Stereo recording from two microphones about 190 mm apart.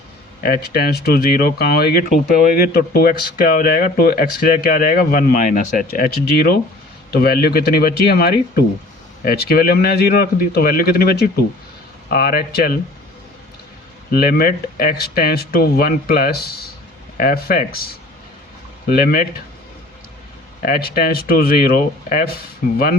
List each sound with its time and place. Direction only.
0.4 s speech: 50° left (ahead or behind)
14.1 s speech: 50° left (ahead or behind)
18.9 s speech: 50° left (ahead or behind)
20.6 s speech: 50° left (ahead or behind)